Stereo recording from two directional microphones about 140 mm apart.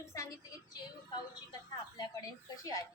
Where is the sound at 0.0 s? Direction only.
20° left (ahead or behind).